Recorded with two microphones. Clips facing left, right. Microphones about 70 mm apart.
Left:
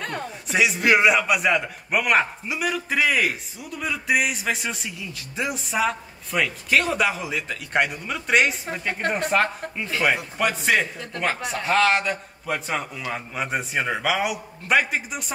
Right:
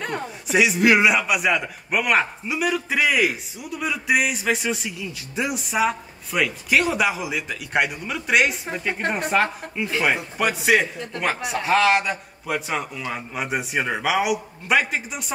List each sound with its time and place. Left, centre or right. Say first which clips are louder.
0.0 s speech: right 2 dB; centre
0.5 s a man's voice: right 2 dB; centre